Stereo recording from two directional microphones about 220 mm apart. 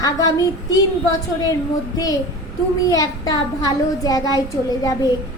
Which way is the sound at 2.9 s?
15° left (ahead or behind).